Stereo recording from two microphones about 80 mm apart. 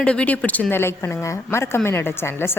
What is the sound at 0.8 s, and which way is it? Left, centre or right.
A woman's voice, left.